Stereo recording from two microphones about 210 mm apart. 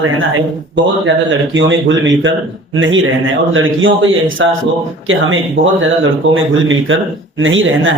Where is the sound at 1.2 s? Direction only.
60° right (ahead or behind).